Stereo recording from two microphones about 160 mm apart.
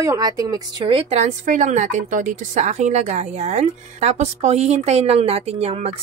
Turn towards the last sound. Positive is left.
turn(degrees=-40)  # may be behind; listen again after turning